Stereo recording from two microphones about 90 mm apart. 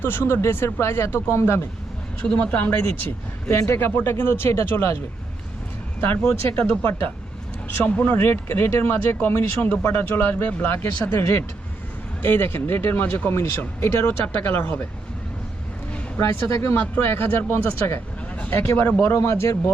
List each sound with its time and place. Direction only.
0.0 s speech: 25° left (ahead or behind)
2.2 s speech: 15° left (ahead or behind)
3.5 s speech: 30° left (ahead or behind)
6.0 s speech: 20° left (ahead or behind)
16.1 s speech: 25° left (ahead or behind)